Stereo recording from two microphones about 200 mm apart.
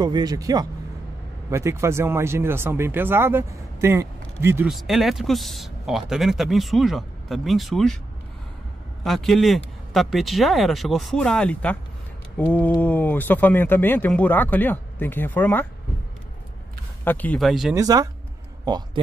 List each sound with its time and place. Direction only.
0.0 s speech: 20° right (ahead or behind)
4.6 s speech: centre (ahead or behind)
9.0 s speech: centre (ahead or behind)
12.8 s speech: 10° left (ahead or behind)
17.0 s speech: 10° left (ahead or behind)
17.7 s speech: 15° right (ahead or behind)